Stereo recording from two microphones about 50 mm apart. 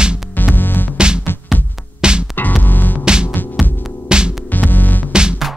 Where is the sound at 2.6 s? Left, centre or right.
Left.